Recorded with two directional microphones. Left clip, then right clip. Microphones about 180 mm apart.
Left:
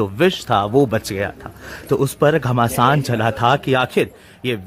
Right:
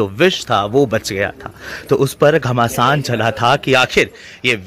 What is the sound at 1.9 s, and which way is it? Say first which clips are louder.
A man's voice: right 4 dB; centre (ahead or behind).